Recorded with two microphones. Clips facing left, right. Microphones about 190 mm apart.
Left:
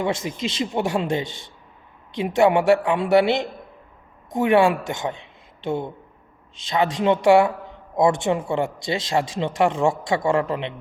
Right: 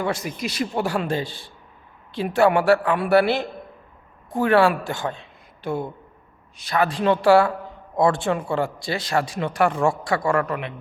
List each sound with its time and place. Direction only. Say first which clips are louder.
0.3 s speech: left 1 dB; 25° left (ahead or behind)